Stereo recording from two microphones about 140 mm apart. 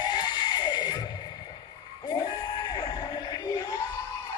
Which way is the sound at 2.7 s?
30° left (ahead or behind).